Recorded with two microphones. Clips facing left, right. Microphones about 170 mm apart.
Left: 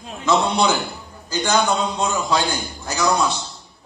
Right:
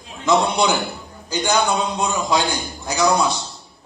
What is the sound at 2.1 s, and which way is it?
A man's voice, 15° right (ahead or behind).